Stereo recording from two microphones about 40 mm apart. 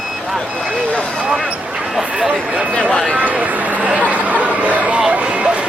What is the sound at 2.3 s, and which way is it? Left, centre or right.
Speech, right.